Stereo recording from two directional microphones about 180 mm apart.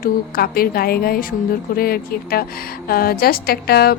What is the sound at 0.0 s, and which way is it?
A woman's voice, 55° left (ahead or behind).